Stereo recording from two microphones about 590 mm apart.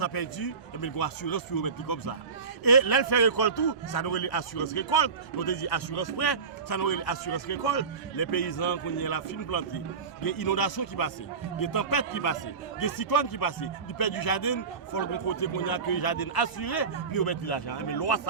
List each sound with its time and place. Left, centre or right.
0.0 s a man's voice: left